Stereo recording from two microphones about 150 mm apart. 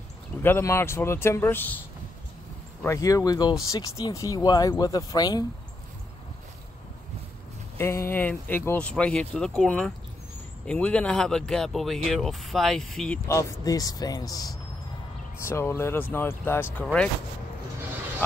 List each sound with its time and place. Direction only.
0.4 s speech: 15° left (ahead or behind)
2.8 s speech: 20° left (ahead or behind)
7.7 s speech: 15° left (ahead or behind)
13.7 s speech: 25° left (ahead or behind); by 17.1 s 5° left (ahead or behind)